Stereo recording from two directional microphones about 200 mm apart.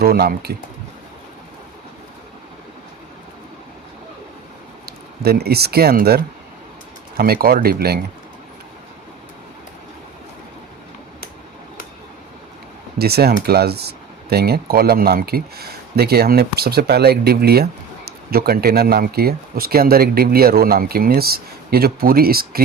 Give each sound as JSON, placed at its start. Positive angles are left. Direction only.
{"t": 0.0, "sound": "speech", "side_deg": -50}
{"t": 4.9, "sound": "speech", "side_deg": -50}
{"t": 13.0, "sound": "speech", "side_deg": -50}